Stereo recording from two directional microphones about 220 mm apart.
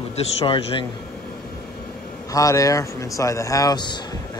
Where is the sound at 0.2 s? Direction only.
25° left (ahead or behind).